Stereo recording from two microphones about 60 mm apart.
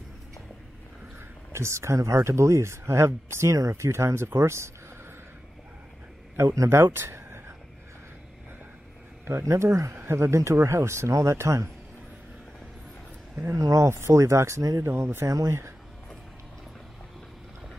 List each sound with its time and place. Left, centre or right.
1.5 s speech: right
6.3 s speech: right
7.0 s a sound: right
9.2 s speech: right
13.6 s speech: right
13.8 s speech: right
14.9 s speech: right